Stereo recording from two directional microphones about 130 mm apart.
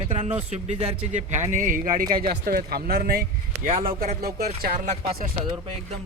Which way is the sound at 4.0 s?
75° right (ahead or behind).